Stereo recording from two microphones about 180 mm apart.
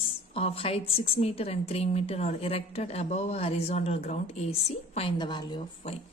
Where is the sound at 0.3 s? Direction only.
30° left (ahead or behind).